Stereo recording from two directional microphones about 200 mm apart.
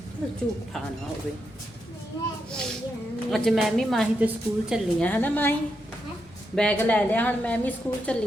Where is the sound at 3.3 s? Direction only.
Centre (ahead or behind).